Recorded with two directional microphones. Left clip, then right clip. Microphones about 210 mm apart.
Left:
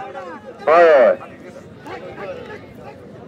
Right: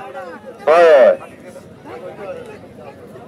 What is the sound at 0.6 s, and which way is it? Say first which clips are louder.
Speech: right 2 dB; 50° right (ahead or behind).